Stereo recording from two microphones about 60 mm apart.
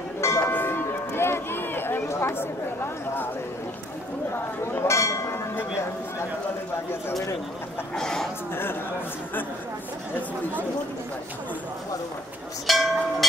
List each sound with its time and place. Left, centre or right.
0.2 s music: left
0.5 s run: left
4.8 s a sound: left
7.9 s speech: centre
12.6 s cowbell: centre